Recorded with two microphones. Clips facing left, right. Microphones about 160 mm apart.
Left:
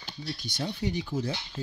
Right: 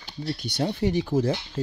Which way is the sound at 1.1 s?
90° right.